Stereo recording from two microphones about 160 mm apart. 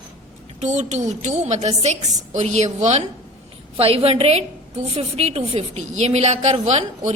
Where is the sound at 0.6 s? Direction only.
45° right (ahead or behind).